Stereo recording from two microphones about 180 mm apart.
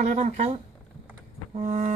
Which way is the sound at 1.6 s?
40° right (ahead or behind).